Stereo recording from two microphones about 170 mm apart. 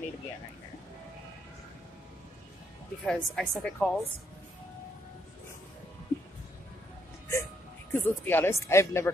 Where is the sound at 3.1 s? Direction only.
5° left (ahead or behind).